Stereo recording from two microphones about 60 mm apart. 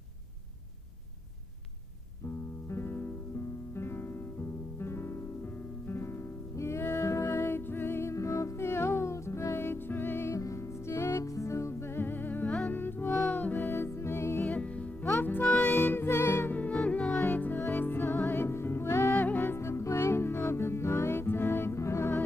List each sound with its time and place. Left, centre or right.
2.7 s music: left
6.5 s music: left
10.3 s music: left
13.7 s music: left
14.4 s music: left
16.8 s music: centre
17.2 s music: left
19.1 s music: left